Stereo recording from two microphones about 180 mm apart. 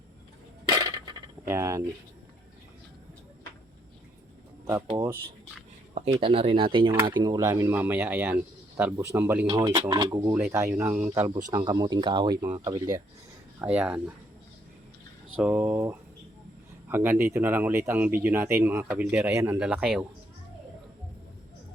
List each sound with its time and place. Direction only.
0.7 s coin: 25° right (ahead or behind)
1.5 s speech: 15° right (ahead or behind)
4.6 s speech: 20° right (ahead or behind)
6.1 s speech: 30° right (ahead or behind); by 9.5 s 10° right (ahead or behind)
9.5 s speech: 20° right (ahead or behind)
11.5 s speech: 20° right (ahead or behind)
13.6 s speech: 10° right (ahead or behind)
15.4 s speech: 10° right (ahead or behind)